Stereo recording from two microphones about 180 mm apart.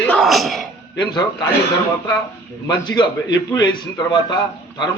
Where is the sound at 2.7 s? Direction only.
25° left (ahead or behind).